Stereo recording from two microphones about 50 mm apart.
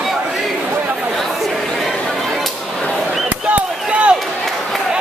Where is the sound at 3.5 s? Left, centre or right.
Right.